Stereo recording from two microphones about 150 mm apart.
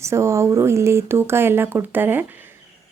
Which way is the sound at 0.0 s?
20° right (ahead or behind).